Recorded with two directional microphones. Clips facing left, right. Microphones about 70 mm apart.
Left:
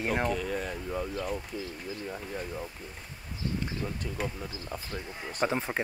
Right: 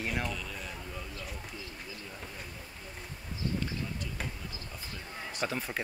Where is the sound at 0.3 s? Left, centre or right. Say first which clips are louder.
Left 9 dB; left.